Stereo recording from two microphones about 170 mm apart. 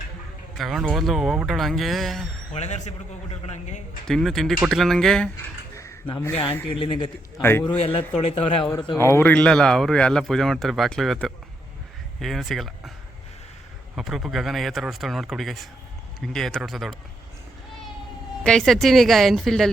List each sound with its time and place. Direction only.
0.5 s speech: centre (ahead or behind)
2.5 s speech: 40° left (ahead or behind)
4.0 s speech: centre (ahead or behind)
6.7 s a man's voice: 30° left (ahead or behind)
9.0 s speech: 15° left (ahead or behind)
13.9 s speech: centre (ahead or behind)
18.4 s speech: 5° left (ahead or behind)